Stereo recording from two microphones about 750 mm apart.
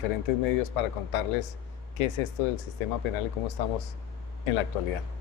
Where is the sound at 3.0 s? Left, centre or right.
Left.